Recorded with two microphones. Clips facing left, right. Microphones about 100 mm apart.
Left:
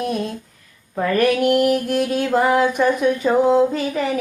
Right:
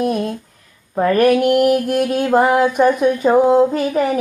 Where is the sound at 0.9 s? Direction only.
40° right (ahead or behind).